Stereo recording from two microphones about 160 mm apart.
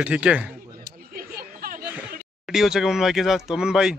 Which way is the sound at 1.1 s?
65° right (ahead or behind).